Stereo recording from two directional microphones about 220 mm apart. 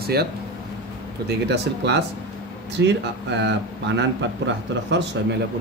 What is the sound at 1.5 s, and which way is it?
A man's voice, 50° right (ahead or behind).